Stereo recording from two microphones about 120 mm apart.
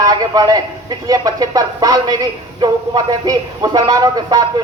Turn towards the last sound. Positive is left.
turn(degrees=-35)  # may be behind; listen again after turning